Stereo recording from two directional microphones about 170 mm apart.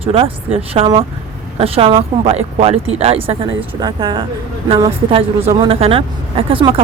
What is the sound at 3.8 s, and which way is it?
Speech, 25° right (ahead or behind).